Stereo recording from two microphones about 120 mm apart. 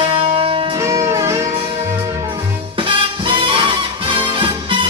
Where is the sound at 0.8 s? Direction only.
25° right (ahead or behind).